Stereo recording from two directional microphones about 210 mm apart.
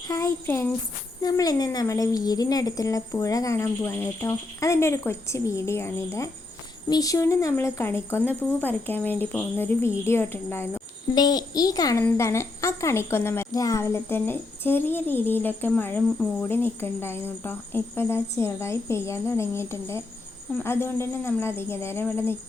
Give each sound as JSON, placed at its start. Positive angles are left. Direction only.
{"t": 0.1, "sound": "speech", "side_deg": 10}